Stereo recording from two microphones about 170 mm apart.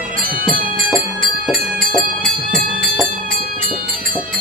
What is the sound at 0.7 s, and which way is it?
Music, centre (ahead or behind).